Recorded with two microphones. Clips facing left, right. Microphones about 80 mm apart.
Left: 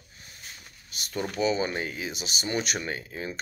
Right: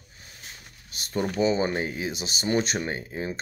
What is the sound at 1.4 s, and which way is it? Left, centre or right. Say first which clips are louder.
Speech: right 2 dB; right.